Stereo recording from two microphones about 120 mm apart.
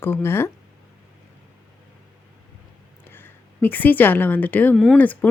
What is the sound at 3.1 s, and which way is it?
A woman's voice, 15° left (ahead or behind).